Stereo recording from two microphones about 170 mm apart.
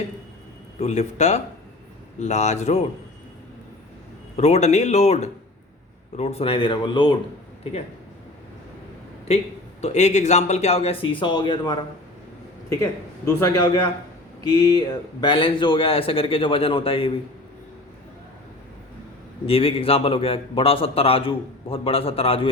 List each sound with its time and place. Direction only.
0.8 s a man's voice: 40° left (ahead or behind)
4.4 s a man's voice: 40° left (ahead or behind)
9.8 s a man's voice: 40° left (ahead or behind); by 11.8 s 25° left (ahead or behind)
12.7 s a man's voice: 15° left (ahead or behind); by 17.1 s 30° left (ahead or behind)
19.5 s a man's voice: 35° left (ahead or behind)